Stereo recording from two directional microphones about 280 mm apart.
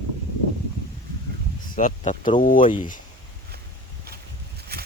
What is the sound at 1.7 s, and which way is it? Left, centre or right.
Speech, left.